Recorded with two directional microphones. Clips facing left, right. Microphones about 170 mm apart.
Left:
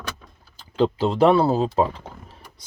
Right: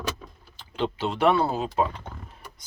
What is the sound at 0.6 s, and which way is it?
Speech, 40° left (ahead or behind).